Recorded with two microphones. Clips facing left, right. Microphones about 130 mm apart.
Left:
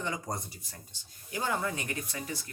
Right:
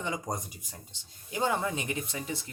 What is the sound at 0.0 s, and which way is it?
Speech, 20° right (ahead or behind).